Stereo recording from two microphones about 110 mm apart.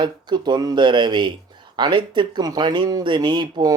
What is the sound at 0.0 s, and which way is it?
Speech, 40° right (ahead or behind).